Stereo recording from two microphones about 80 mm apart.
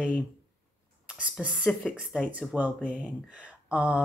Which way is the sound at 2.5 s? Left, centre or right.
Centre.